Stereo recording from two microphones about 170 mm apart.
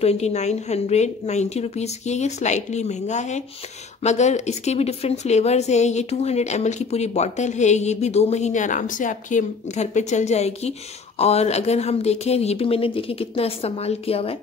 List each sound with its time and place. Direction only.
0.0 s speech: 40° left (ahead or behind)